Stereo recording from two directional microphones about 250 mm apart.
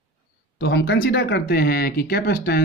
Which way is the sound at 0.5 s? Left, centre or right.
Left.